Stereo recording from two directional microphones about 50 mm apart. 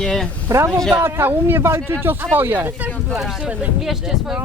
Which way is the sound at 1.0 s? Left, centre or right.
Right.